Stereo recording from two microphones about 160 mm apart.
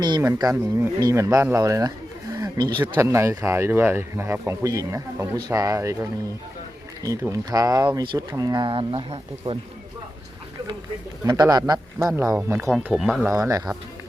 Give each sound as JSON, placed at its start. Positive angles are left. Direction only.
{"t": 0.0, "sound": "speech", "side_deg": -25}
{"t": 11.2, "sound": "speech", "side_deg": -25}
{"t": 12.7, "sound": "speech", "side_deg": 0}
{"t": 13.3, "sound": "speech", "side_deg": -20}